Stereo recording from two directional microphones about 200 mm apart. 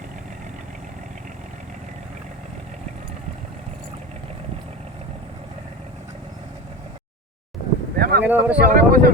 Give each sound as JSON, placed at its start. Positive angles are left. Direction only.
{"t": 7.9, "sound": "boat", "side_deg": -50}
{"t": 8.2, "sound": "speech", "side_deg": -10}
{"t": 8.6, "sound": "speech", "side_deg": -45}